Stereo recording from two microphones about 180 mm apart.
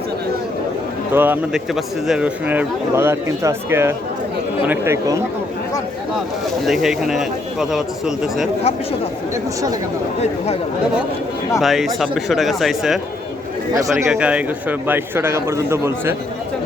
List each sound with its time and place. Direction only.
1.1 s speech: 10° right (ahead or behind)
6.7 s speech: centre (ahead or behind)
11.6 s speech: centre (ahead or behind)
14.1 s speech: 5° right (ahead or behind)